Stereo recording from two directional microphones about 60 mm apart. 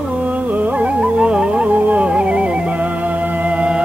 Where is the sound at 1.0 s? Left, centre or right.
Centre.